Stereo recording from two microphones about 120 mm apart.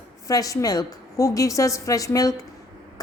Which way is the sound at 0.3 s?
30° left (ahead or behind).